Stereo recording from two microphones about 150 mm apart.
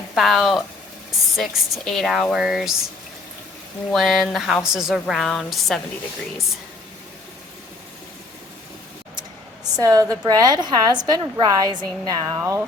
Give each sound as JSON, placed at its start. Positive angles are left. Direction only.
{"t": 0.1, "sound": "speech", "side_deg": 0}
{"t": 3.9, "sound": "speech", "side_deg": 0}
{"t": 9.8, "sound": "a woman's voice", "side_deg": -25}